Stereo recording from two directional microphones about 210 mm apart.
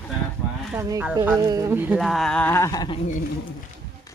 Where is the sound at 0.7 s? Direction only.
10° right (ahead or behind); by 3.0 s 20° left (ahead or behind).